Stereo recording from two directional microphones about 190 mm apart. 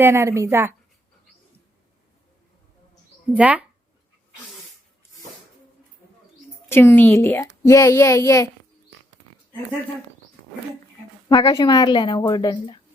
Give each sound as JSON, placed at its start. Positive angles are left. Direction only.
{"t": 0.0, "sound": "speech", "side_deg": -15}
{"t": 3.3, "sound": "speech", "side_deg": -5}
{"t": 6.7, "sound": "a child's voice", "side_deg": 10}
{"t": 11.3, "sound": "a woman's voice", "side_deg": 25}